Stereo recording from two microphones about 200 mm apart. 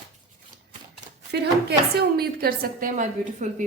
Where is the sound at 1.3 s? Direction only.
55° right (ahead or behind).